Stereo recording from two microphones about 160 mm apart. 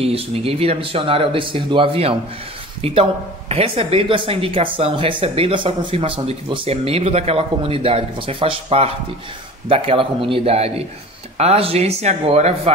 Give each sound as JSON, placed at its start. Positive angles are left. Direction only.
{"t": 0.0, "sound": "speech", "side_deg": -40}